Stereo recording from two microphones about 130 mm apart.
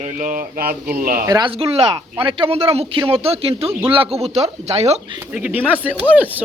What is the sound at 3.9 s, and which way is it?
Speech, 45° right (ahead or behind).